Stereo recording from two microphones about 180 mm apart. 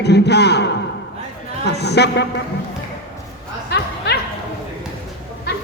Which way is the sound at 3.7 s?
65° left (ahead or behind).